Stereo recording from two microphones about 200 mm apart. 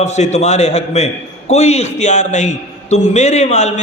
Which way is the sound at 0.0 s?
35° left (ahead or behind).